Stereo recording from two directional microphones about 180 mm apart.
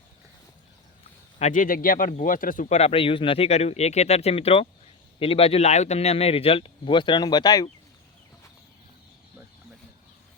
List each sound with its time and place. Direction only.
1.4 s speech: 45° left (ahead or behind); by 7.7 s 20° left (ahead or behind)